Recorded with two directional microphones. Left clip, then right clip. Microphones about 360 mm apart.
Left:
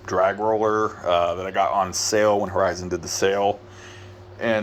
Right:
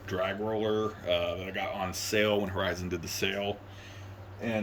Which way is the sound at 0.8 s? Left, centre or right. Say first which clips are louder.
Left 9 dB; centre.